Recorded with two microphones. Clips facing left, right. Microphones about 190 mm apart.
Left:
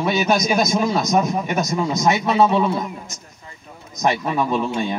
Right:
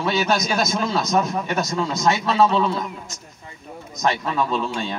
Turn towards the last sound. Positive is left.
turn(degrees=20)  # may be behind; listen again after turning